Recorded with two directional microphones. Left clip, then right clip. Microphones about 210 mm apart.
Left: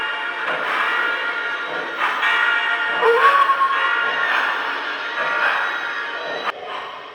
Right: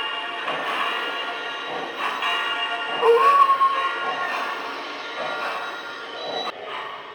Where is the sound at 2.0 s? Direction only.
15° left (ahead or behind).